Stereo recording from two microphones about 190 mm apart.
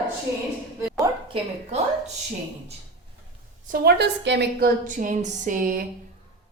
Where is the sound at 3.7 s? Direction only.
60° right (ahead or behind).